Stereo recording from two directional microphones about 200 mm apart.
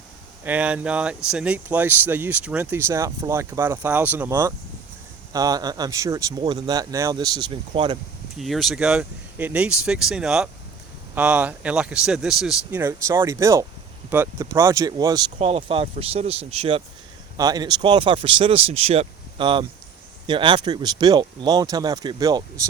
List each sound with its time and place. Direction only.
0.4 s speech: 5° right (ahead or behind); by 7.9 s 25° right (ahead or behind)
8.4 s speech: centre (ahead or behind); by 15.2 s 20° right (ahead or behind)
15.4 s speech: 30° right (ahead or behind)
17.3 s speech: 20° right (ahead or behind)